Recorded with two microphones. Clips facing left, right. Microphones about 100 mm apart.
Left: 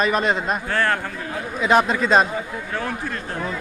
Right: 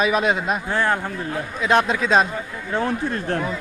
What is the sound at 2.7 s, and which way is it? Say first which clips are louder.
Speech: right 5 dB; 30° right (ahead or behind).